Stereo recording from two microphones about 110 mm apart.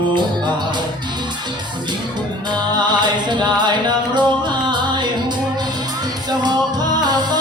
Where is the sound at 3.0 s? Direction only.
45° right (ahead or behind).